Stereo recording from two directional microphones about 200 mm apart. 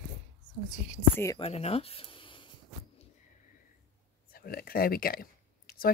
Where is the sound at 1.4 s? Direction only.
30° left (ahead or behind).